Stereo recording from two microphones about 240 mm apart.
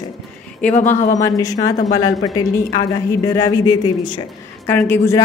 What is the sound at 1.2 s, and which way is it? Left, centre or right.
A woman's voice, centre.